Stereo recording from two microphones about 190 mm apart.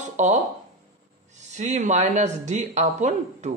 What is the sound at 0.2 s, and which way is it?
Speech, 40° right (ahead or behind).